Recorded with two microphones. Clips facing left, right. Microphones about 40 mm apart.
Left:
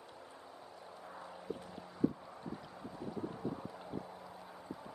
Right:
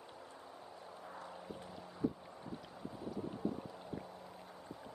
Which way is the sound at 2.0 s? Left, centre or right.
Centre.